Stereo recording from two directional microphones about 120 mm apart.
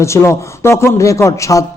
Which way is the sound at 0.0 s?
25° left (ahead or behind).